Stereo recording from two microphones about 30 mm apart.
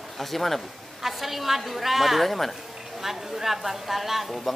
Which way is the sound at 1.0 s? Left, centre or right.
Centre.